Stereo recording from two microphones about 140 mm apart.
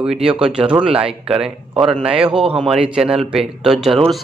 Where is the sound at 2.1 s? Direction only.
40° right (ahead or behind).